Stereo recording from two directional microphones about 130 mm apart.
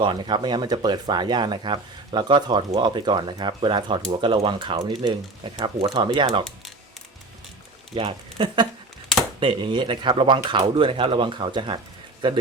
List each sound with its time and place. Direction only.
0.0 s speech: 35° right (ahead or behind)
7.9 s speech: 40° right (ahead or behind)